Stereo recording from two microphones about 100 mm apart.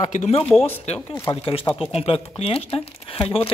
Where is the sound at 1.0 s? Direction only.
20° left (ahead or behind).